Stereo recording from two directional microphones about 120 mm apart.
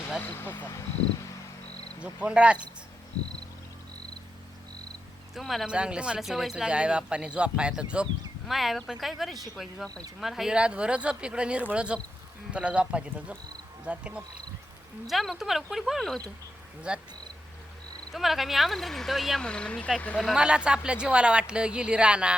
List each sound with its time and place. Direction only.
0.2 s speech: 15° left (ahead or behind)
2.0 s speech: 10° right (ahead or behind)
5.3 s speech: centre (ahead or behind)
16.9 s speech: 10° right (ahead or behind)
18.1 s speech: centre (ahead or behind)
20.2 s speech: 5° right (ahead or behind)